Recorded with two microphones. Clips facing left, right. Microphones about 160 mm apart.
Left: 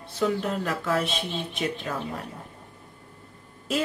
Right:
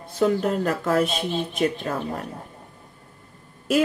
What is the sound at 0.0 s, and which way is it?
Speech, 45° right (ahead or behind).